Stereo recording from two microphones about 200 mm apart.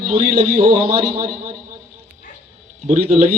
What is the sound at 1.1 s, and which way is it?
Speech, 45° right (ahead or behind).